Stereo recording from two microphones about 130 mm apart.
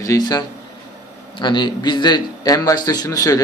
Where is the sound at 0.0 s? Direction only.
30° left (ahead or behind).